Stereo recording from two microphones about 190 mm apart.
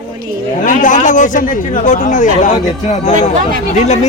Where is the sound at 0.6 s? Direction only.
45° left (ahead or behind).